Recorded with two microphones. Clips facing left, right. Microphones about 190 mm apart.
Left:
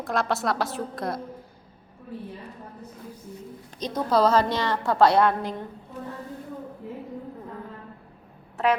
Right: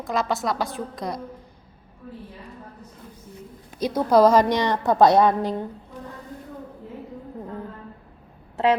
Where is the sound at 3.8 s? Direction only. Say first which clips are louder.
Right 5 dB; 10° right (ahead or behind).